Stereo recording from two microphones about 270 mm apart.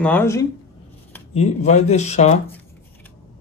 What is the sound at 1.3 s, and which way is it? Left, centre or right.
Speech, left.